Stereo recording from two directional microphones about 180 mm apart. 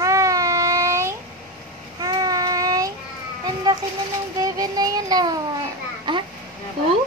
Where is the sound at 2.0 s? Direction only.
20° right (ahead or behind).